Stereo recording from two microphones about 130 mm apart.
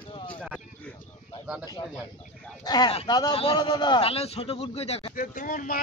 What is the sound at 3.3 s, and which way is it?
Speech, 45° left (ahead or behind).